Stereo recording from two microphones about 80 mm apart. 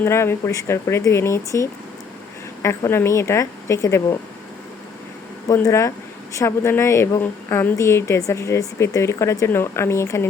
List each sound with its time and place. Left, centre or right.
0.0 s speech: left
5.6 s speech: left
7.2 s speech: left
7.8 s speech: left
9.5 s speech: left